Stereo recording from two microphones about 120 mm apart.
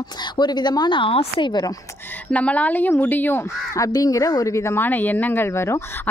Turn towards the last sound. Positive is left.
turn(degrees=20)  # may be behind; listen again after turning